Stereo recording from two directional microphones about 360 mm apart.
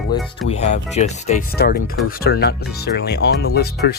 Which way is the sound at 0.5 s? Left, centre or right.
Centre.